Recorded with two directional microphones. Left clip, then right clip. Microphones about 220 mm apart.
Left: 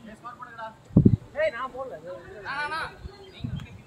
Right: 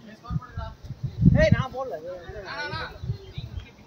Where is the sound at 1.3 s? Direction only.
55° right (ahead or behind).